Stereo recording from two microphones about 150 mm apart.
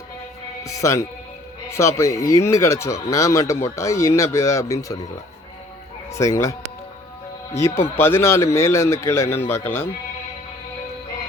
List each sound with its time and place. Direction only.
0.6 s speech: 20° left (ahead or behind)
6.1 s speech: 20° left (ahead or behind)